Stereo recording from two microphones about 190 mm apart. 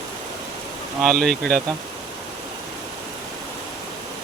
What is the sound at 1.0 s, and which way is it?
Speech, 5° left (ahead or behind).